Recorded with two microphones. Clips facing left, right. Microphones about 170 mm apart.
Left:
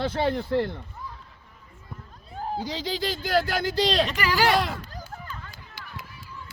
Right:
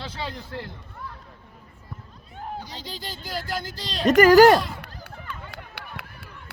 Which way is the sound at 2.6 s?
90° left.